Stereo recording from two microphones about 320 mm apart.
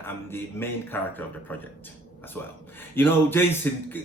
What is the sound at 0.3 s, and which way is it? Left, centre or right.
Speech, centre.